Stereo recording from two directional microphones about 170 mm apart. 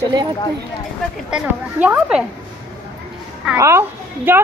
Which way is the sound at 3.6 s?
15° right (ahead or behind).